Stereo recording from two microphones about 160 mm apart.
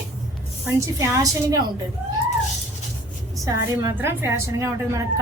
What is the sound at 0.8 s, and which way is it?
Speech, 20° right (ahead or behind).